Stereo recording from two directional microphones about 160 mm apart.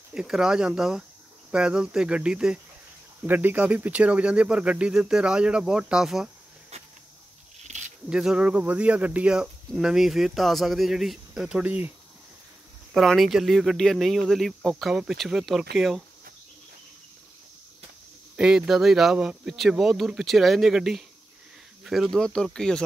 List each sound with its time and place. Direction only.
0.1 s speech: 5° right (ahead or behind)
6.7 s a sound: 40° right (ahead or behind)
8.1 s speech: 5° right (ahead or behind)
12.9 s speech: centre (ahead or behind)
18.3 s speech: 5° right (ahead or behind)